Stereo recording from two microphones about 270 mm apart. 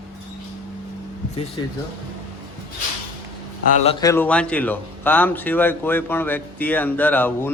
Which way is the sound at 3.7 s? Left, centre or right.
Left.